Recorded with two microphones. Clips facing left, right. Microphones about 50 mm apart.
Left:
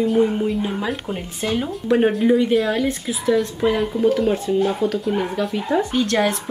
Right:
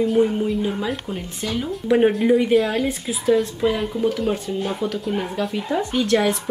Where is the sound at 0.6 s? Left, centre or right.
Centre.